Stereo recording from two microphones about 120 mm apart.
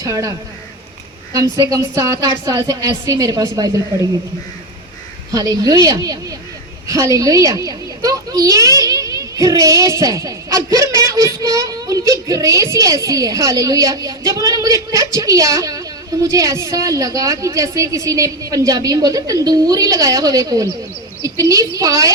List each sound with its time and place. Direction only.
0.0 s a child's voice: 30° right (ahead or behind)
5.3 s a woman's voice: 30° right (ahead or behind)